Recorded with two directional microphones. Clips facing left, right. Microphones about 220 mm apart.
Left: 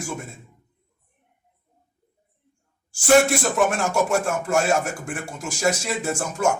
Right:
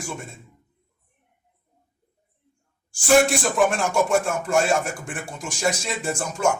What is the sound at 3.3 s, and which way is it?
Speech, 5° left (ahead or behind).